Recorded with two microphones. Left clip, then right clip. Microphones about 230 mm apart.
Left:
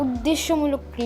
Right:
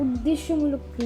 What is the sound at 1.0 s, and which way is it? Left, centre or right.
Speech, centre.